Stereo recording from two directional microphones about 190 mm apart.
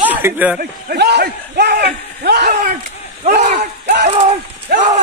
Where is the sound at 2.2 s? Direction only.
55° right (ahead or behind).